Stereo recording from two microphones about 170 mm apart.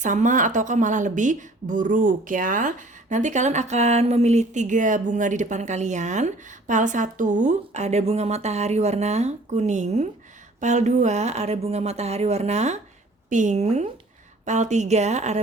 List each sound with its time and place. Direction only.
0.0 s a woman's voice: 50° right (ahead or behind)